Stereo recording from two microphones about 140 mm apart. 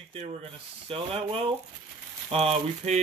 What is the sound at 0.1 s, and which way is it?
Speech, 45° right (ahead or behind).